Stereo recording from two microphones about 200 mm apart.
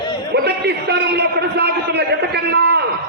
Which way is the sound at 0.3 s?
55° right (ahead or behind).